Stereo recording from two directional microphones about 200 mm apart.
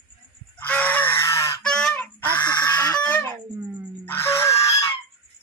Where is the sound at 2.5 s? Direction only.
20° left (ahead or behind).